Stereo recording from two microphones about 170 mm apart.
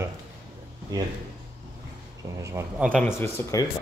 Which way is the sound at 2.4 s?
15° right (ahead or behind).